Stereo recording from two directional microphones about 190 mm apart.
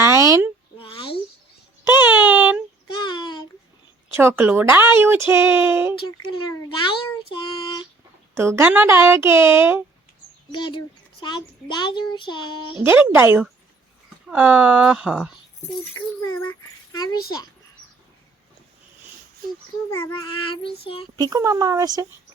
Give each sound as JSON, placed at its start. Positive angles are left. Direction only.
{"t": 0.0, "sound": "a sound", "side_deg": -15}
{"t": 0.8, "sound": "a sound", "side_deg": 25}
{"t": 2.0, "sound": "a sound", "side_deg": -10}
{"t": 2.9, "sound": "a sound", "side_deg": 25}
{"t": 4.1, "sound": "speech", "side_deg": -10}
{"t": 6.5, "sound": "a child's voice", "side_deg": 20}
{"t": 7.3, "sound": "female singing", "side_deg": 25}
{"t": 8.4, "sound": "speech", "side_deg": -15}
{"t": 10.5, "sound": "a child's voice", "side_deg": 25}
{"t": 12.8, "sound": "speech", "side_deg": -10}
{"t": 16.9, "sound": "a child's voice", "side_deg": 20}
{"t": 20.2, "sound": "a child's voice", "side_deg": 25}
{"t": 21.2, "sound": "speech", "side_deg": -20}